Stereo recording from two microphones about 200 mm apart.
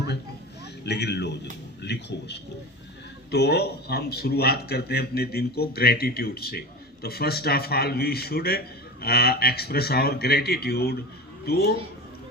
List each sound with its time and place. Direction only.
0.9 s a man's voice: 55° left (ahead or behind)